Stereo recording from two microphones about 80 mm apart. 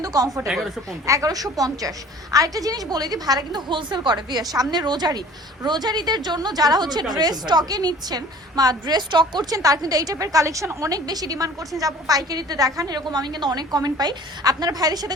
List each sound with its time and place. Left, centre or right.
0.0 s speech: right
0.3 s speech: centre
1.0 s a woman's voice: right